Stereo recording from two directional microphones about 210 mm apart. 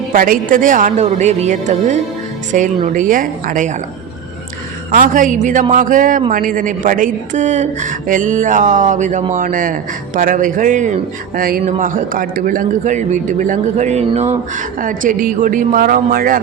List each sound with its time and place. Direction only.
0.1 s speech: 40° right (ahead or behind)
4.9 s speech: 40° right (ahead or behind)